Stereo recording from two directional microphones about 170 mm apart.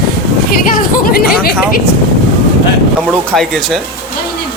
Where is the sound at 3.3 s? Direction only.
Centre (ahead or behind).